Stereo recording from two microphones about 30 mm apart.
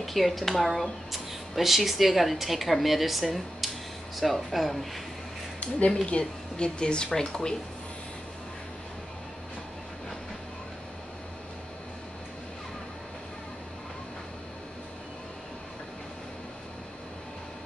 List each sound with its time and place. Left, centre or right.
0.0 s speech: centre
6.0 s speech: left